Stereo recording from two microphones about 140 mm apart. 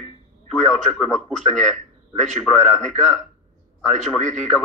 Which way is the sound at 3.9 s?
55° right (ahead or behind).